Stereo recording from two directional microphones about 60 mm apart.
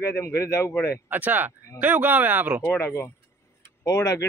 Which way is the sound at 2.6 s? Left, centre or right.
Left.